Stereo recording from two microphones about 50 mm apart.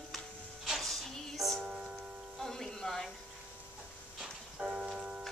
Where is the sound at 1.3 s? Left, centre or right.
Centre.